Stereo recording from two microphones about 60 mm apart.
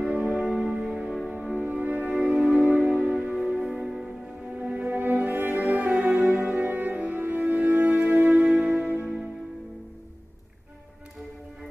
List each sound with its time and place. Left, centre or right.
0.0 s music: centre
1.6 s music: right
2.1 s music: centre
2.6 s music: right
4.8 s music: right
9.0 s music: centre